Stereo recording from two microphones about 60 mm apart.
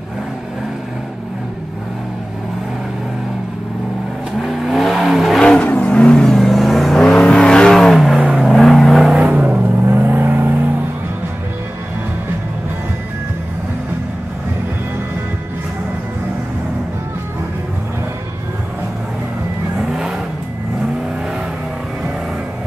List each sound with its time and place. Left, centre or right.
4.4 s vehicle: centre
5.4 s vehicle: centre
7.8 s vehicle: centre
8.2 s vehicle: centre
8.5 s vehicle: centre
9.1 s vehicle: right
9.8 s vehicle: right
19.8 s vehicle: centre